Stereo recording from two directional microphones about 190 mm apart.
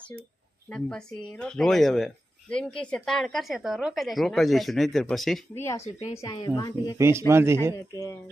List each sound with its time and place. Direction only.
0.7 s speech: 5° left (ahead or behind)
5.5 s speech: 15° left (ahead or behind)
7.0 s speech: 15° right (ahead or behind)
7.9 s speech: 15° left (ahead or behind)